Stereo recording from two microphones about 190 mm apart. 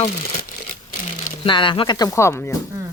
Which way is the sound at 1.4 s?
25° left (ahead or behind).